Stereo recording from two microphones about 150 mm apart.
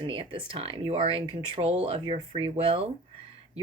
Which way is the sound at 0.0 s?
35° right (ahead or behind).